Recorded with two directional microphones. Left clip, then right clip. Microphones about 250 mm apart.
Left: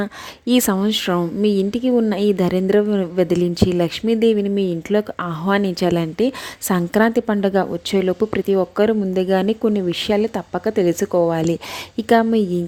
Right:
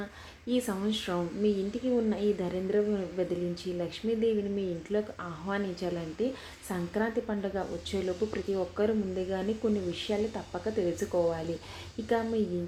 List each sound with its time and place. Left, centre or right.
0.0 s a woman's voice: left